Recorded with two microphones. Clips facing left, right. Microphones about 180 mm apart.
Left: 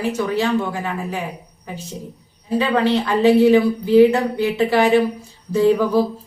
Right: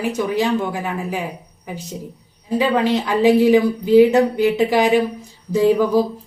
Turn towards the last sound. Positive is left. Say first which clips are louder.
# even
turn(degrees=-15)  # may be behind; listen again after turning